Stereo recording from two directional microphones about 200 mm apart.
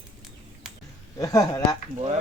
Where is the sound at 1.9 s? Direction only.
35° right (ahead or behind).